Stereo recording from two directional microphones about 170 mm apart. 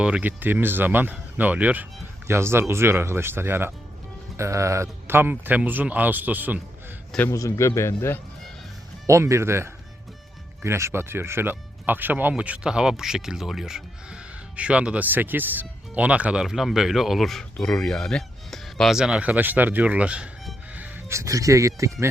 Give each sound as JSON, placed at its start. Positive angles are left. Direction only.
{"t": 0.0, "sound": "speech", "side_deg": -10}
{"t": 7.1, "sound": "a man's voice", "side_deg": 10}
{"t": 9.0, "sound": "speech", "side_deg": -15}